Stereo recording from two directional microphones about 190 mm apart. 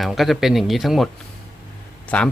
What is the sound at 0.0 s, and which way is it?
A man's voice, centre (ahead or behind).